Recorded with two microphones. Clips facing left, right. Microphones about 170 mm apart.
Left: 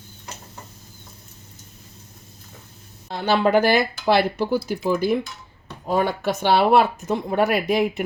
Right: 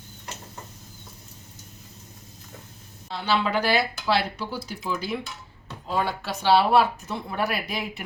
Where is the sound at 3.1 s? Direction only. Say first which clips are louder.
Left 6 dB; 50° left (ahead or behind).